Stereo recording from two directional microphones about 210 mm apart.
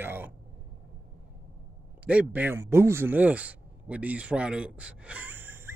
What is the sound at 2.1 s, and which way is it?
Speech, 5° right (ahead or behind).